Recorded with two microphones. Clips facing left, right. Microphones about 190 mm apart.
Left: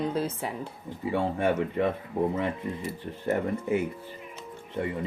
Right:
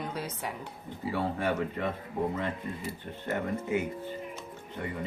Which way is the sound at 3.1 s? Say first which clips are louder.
Left 3 dB; 25° left (ahead or behind).